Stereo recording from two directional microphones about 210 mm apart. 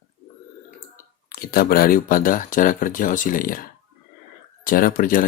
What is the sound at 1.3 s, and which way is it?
Speech, 45° left (ahead or behind).